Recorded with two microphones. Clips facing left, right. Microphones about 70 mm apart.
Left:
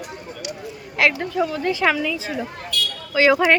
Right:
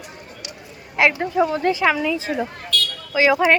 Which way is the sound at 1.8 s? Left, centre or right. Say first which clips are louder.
Left 2 dB; centre.